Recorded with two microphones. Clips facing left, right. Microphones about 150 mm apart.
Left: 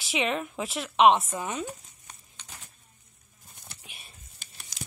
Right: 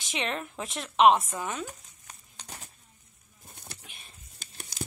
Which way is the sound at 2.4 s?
35° right (ahead or behind).